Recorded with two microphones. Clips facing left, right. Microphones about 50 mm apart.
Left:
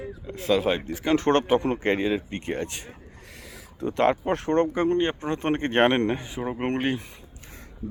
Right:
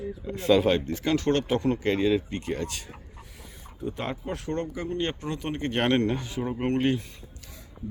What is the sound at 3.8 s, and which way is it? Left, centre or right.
Speech, left.